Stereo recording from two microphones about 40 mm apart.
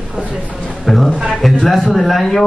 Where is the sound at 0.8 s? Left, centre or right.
Centre.